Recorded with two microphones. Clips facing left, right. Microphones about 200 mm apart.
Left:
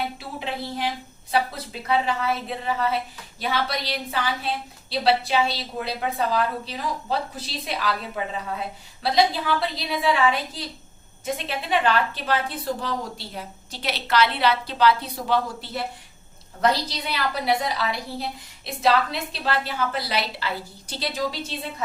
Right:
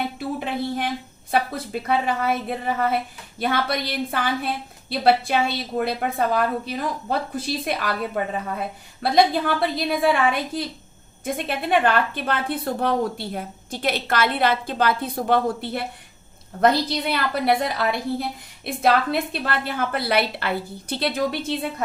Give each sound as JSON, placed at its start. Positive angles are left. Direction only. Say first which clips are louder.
{"t": 0.2, "sound": "a woman's voice", "louder": "right 5 dB", "side_deg": -50}